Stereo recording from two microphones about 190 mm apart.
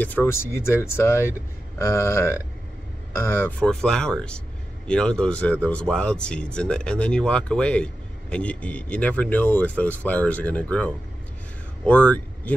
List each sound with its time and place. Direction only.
0.0 s speech: 10° left (ahead or behind)